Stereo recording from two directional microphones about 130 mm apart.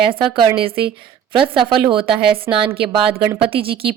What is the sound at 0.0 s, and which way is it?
Speech, 40° right (ahead or behind).